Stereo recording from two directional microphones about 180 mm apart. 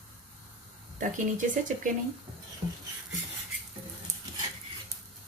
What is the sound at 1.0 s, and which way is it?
Speech, 45° right (ahead or behind).